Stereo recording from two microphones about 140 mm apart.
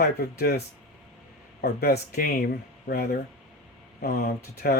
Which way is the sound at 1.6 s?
90° left.